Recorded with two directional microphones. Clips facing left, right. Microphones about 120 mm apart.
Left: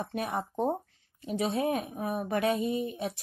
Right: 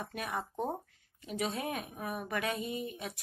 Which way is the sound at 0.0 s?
35° left (ahead or behind).